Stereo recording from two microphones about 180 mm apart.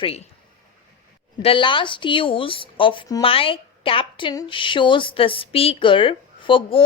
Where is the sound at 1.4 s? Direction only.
30° left (ahead or behind).